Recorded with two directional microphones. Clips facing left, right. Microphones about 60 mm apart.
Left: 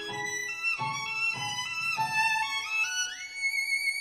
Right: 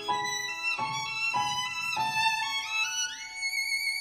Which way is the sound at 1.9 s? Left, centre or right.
Left.